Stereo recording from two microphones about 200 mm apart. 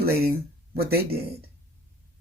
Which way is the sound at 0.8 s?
50° right (ahead or behind).